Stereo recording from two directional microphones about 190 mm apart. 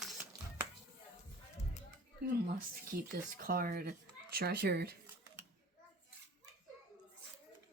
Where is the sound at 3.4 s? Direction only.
50° right (ahead or behind).